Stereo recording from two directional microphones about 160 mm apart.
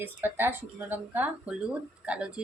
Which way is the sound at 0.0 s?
10° right (ahead or behind).